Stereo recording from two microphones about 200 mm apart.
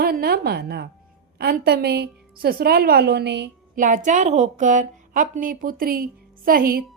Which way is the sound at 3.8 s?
40° right (ahead or behind).